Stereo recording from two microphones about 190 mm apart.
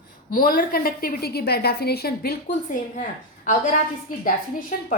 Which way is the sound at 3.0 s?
45° left (ahead or behind).